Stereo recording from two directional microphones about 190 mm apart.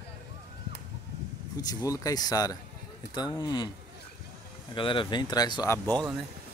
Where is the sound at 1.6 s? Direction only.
20° left (ahead or behind).